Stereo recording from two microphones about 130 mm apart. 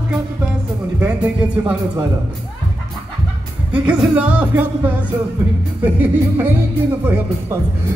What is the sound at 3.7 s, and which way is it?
Speech, 10° right (ahead or behind).